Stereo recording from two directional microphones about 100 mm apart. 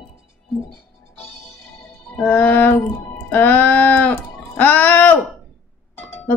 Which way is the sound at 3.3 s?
20° left (ahead or behind).